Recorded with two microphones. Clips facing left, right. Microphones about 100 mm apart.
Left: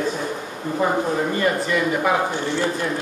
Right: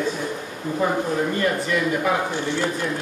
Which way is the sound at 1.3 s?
5° left (ahead or behind).